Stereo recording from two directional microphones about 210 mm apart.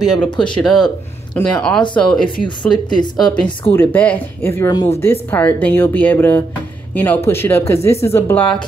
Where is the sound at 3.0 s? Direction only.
20° left (ahead or behind).